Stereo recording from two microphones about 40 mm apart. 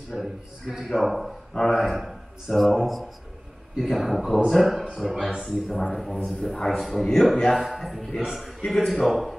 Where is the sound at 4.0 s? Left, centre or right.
Centre.